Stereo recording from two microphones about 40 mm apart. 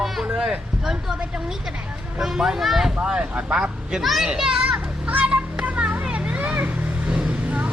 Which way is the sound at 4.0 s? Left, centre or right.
Centre.